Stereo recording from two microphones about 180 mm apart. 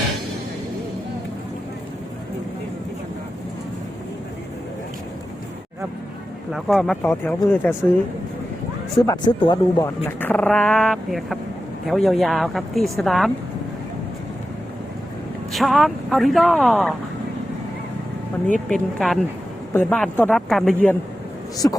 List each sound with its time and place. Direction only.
6.5 s speech: centre (ahead or behind)
9.0 s speech: 20° left (ahead or behind)
10.1 s speech: 10° left (ahead or behind)
15.5 s speech: centre (ahead or behind)
18.7 s speech: centre (ahead or behind)
21.6 s speech: 15° left (ahead or behind)